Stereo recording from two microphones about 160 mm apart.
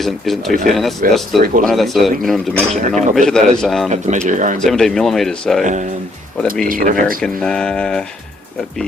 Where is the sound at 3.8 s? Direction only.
50° right (ahead or behind).